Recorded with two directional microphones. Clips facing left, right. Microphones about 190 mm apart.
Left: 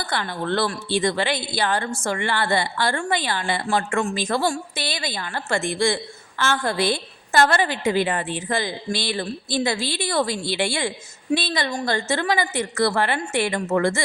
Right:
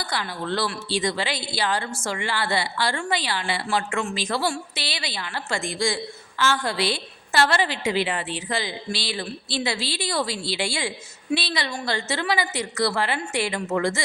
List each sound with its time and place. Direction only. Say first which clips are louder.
0.0 s a woman's voice: left 3 dB; 55° left (ahead or behind)